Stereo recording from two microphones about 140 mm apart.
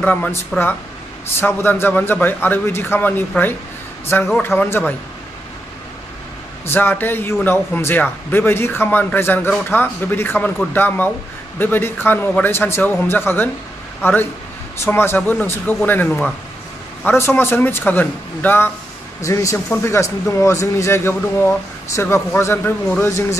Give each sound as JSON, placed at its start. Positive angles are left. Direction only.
{"t": 0.0, "sound": "a man's voice", "side_deg": 10}
{"t": 1.4, "sound": "a man's voice", "side_deg": 15}
{"t": 6.6, "sound": "a man's voice", "side_deg": 15}